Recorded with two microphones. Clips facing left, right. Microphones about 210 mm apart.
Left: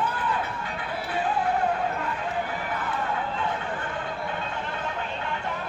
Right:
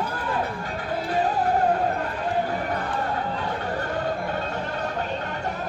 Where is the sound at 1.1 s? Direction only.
40° right (ahead or behind).